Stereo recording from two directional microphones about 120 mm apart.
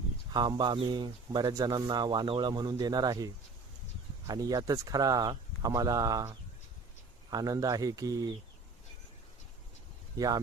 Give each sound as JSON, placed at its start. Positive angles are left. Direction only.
{"t": 0.3, "sound": "speech", "side_deg": -40}
{"t": 4.3, "sound": "speech", "side_deg": -30}
{"t": 10.2, "sound": "speech", "side_deg": -30}